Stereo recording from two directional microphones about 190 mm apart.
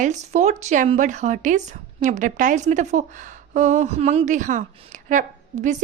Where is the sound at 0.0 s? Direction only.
40° right (ahead or behind).